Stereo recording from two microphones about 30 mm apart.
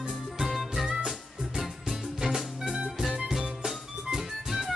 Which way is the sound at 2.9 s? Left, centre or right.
Centre.